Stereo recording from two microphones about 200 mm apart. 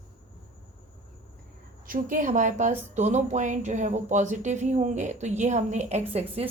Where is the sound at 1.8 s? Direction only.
45° right (ahead or behind).